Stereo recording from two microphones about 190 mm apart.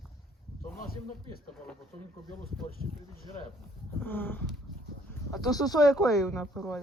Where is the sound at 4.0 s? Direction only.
10° left (ahead or behind).